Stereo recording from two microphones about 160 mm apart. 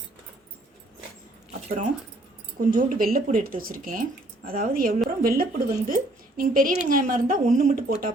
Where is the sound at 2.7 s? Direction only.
60° right (ahead or behind).